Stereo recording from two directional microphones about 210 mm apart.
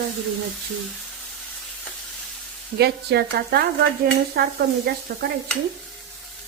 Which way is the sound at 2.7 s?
50° right (ahead or behind).